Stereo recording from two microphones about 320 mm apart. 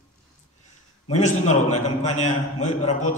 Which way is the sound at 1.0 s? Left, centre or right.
Left.